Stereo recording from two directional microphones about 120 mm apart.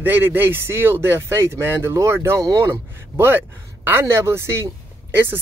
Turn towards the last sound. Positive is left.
turn(degrees=-20)  # may be behind; listen again after turning